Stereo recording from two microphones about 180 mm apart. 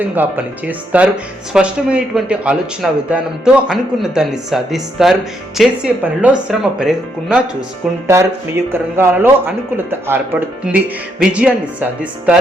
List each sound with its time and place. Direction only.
0.0 s speech: 10° right (ahead or behind)
8.0 s speech: 15° right (ahead or behind)